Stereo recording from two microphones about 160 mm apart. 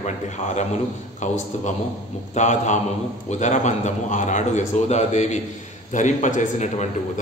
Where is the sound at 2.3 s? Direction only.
50° left (ahead or behind).